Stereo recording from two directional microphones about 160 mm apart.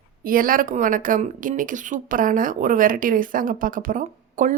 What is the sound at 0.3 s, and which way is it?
Speech, 60° right (ahead or behind).